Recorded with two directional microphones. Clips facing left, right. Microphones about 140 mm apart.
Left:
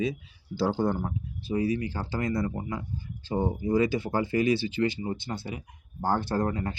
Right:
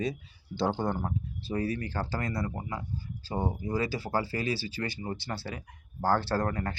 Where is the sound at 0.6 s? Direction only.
10° left (ahead or behind).